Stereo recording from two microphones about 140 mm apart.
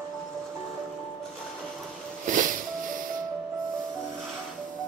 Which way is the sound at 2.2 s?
70° right (ahead or behind).